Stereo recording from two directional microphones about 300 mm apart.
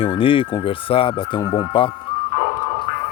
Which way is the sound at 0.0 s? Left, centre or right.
Centre.